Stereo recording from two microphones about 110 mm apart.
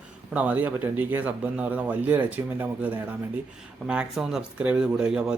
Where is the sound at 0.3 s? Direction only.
15° right (ahead or behind).